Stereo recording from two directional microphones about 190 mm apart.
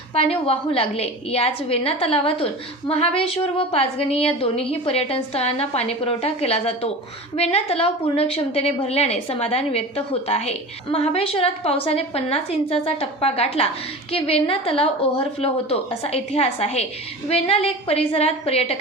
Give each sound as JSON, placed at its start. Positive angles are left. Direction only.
{"t": 0.1, "sound": "a woman's voice", "side_deg": 30}